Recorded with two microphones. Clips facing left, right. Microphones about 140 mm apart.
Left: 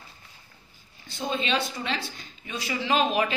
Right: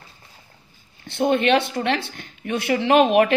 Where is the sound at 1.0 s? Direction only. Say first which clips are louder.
Right 11 dB; 65° right (ahead or behind).